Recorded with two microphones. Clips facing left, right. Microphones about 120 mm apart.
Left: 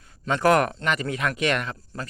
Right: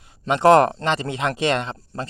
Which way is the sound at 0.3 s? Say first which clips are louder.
Right 6 dB; 25° right (ahead or behind).